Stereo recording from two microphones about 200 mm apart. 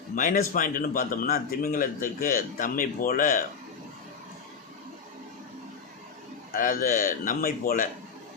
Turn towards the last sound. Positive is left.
turn(degrees=45)  # may be behind; listen again after turning